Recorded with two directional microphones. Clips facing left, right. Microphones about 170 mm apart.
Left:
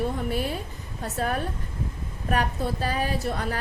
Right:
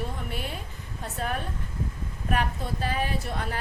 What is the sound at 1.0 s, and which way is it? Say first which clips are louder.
A woman's voice: left 4 dB; 40° left (ahead or behind).